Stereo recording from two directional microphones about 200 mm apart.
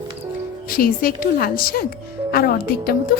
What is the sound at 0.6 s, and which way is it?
A woman's voice, 45° left (ahead or behind).